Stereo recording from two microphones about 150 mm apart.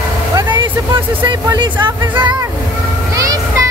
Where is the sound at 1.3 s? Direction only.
30° right (ahead or behind).